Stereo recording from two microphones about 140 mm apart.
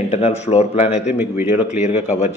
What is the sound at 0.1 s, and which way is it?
Speech, 50° left (ahead or behind).